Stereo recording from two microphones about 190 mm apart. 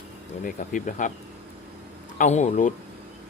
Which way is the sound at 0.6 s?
40° left (ahead or behind).